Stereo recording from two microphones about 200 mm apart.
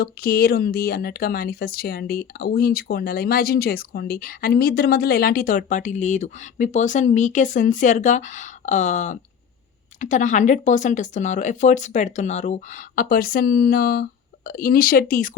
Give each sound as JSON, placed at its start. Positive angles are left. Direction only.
{"t": 0.0, "sound": "speech", "side_deg": 50}